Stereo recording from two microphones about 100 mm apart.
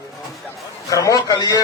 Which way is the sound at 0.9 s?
35° left (ahead or behind).